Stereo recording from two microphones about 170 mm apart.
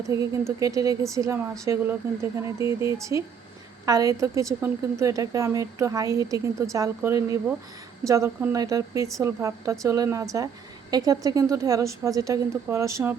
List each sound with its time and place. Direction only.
0.1 s a woman's voice: 15° right (ahead or behind)